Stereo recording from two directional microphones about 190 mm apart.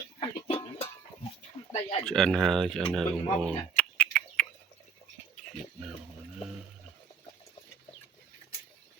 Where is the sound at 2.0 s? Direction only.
Centre (ahead or behind).